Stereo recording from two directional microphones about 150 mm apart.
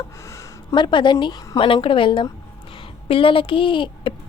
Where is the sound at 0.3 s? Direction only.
25° left (ahead or behind).